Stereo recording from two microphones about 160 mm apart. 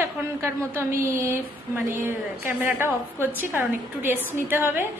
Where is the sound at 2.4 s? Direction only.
15° right (ahead or behind).